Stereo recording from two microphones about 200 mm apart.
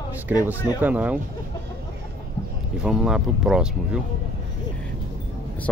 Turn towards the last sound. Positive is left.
turn(degrees=-5)  # may be behind; listen again after turning